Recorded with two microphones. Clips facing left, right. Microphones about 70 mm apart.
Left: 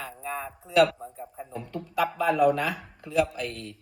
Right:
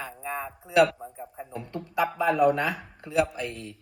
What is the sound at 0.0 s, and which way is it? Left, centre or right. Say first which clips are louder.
Speech: right 1 dB; centre.